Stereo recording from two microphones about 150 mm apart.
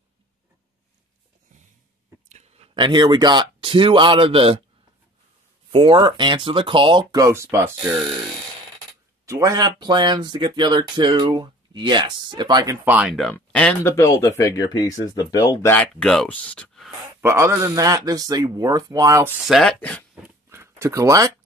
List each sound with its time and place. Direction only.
2.2 s a sound: 45° right (ahead or behind)
2.7 s speech: 30° right (ahead or behind)
5.7 s speech: 35° right (ahead or behind); by 7.9 s 15° right (ahead or behind)
9.2 s speech: 20° right (ahead or behind)
12.8 s speech: 10° right (ahead or behind)
13.1 s speech: 5° left (ahead or behind)
13.9 s speech: 20° left (ahead or behind)
15.7 s speech: 5° left (ahead or behind)
17.2 s speech: 15° right (ahead or behind)
19.4 s speech: centre (ahead or behind)
19.8 s speech: 10° left (ahead or behind)
20.4 s a sound: 15° right (ahead or behind)